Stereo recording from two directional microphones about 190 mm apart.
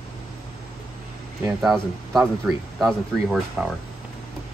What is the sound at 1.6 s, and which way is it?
Speech, centre (ahead or behind).